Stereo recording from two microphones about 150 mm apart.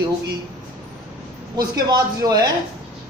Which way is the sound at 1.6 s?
25° right (ahead or behind).